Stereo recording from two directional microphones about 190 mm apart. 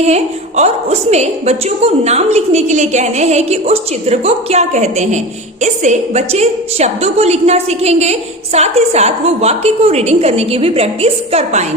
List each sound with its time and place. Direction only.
0.0 s a woman's voice: 35° right (ahead or behind)